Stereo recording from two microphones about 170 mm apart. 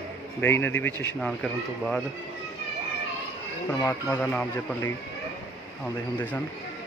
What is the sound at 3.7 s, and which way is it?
Speech, 15° left (ahead or behind).